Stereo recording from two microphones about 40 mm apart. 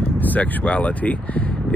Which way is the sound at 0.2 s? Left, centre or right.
Left.